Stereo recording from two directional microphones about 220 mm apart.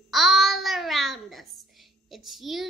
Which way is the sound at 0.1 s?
Centre (ahead or behind).